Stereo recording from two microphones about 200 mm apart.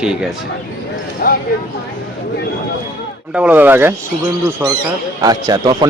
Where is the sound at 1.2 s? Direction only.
45° left (ahead or behind).